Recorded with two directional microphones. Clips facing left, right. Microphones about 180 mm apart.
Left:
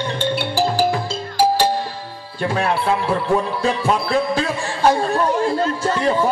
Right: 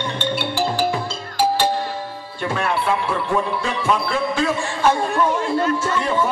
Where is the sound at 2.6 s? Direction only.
40° left (ahead or behind).